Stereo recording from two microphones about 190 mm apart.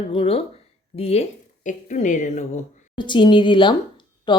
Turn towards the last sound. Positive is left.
turn(degrees=25)  # may be behind; listen again after turning